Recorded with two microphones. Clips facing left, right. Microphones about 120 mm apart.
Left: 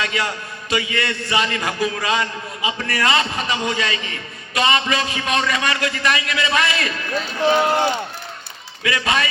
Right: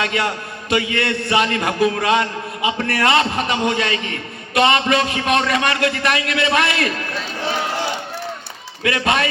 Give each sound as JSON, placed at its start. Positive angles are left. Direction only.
{"t": 0.0, "sound": "a man's voice", "side_deg": -55}
{"t": 8.8, "sound": "a man's voice", "side_deg": -55}